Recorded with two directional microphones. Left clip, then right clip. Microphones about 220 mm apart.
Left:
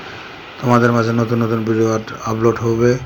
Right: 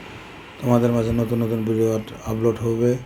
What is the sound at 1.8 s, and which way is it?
Speech, 5° right (ahead or behind).